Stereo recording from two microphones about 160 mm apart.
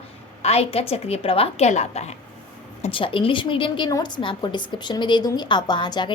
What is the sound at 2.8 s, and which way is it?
A woman's voice, 35° left (ahead or behind).